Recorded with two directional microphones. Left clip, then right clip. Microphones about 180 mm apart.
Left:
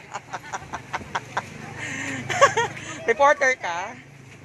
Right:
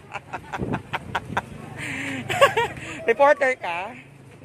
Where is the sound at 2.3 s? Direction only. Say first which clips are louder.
Even; 15° right (ahead or behind).